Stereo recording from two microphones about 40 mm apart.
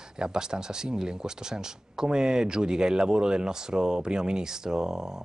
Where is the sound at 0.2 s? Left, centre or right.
Centre.